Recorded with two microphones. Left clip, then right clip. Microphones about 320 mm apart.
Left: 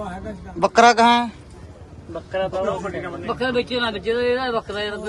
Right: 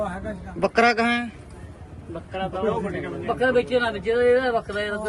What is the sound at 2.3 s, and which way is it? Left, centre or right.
Speech, left.